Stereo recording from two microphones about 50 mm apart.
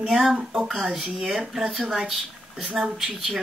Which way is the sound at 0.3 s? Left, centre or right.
Centre.